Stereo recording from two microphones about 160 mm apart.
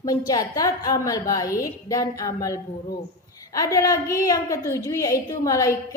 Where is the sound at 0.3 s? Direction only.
20° left (ahead or behind).